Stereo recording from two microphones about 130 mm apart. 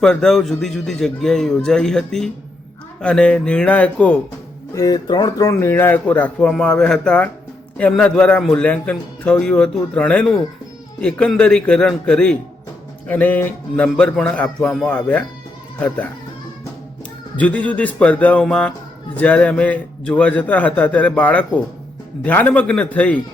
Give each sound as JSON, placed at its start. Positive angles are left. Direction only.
{"t": 0.0, "sound": "a man's voice", "side_deg": 5}
{"t": 4.7, "sound": "speech", "side_deg": 30}
{"t": 5.5, "sound": "a man's voice", "side_deg": 20}
{"t": 17.3, "sound": "a man's voice", "side_deg": 10}